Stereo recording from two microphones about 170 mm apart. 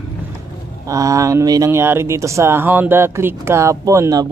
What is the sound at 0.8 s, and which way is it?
Speech, 20° right (ahead or behind).